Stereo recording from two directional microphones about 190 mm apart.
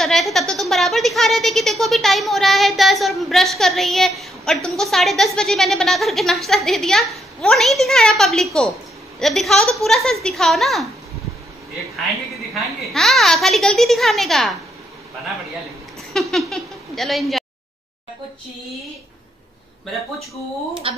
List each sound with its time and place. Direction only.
0.0 s speech: centre (ahead or behind)
12.5 s speech: centre (ahead or behind)
16.1 s speech: centre (ahead or behind)
20.9 s speech: 30° right (ahead or behind)